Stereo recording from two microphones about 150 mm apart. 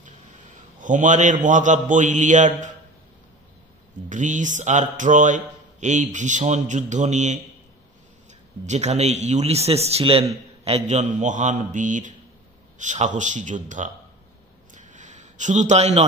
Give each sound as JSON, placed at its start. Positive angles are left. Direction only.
{"t": 0.7, "sound": "a man's voice", "side_deg": -55}
{"t": 4.1, "sound": "a man's voice", "side_deg": -55}
{"t": 8.6, "sound": "a man's voice", "side_deg": -50}
{"t": 14.7, "sound": "a sound", "side_deg": -55}